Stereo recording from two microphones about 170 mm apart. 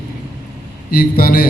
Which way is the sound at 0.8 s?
60° left (ahead or behind).